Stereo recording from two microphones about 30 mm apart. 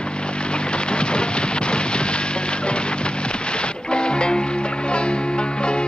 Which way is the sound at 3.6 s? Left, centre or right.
Left.